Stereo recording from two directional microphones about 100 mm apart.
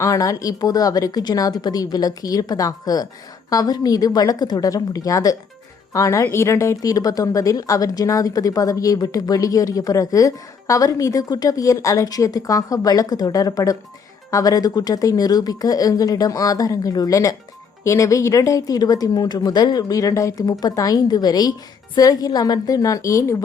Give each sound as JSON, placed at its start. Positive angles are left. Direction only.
{"t": 0.0, "sound": "speech", "side_deg": 35}